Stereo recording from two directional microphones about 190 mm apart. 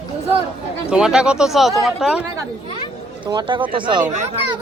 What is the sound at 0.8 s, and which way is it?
Speech, 5° right (ahead or behind).